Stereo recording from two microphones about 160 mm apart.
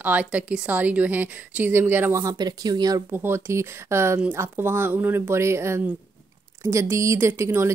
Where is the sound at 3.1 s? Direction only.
15° right (ahead or behind).